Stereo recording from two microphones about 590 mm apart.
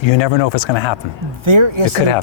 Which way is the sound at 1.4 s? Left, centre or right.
Right.